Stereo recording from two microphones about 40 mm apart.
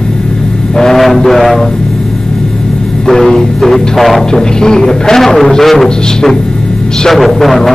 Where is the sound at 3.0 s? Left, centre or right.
Centre.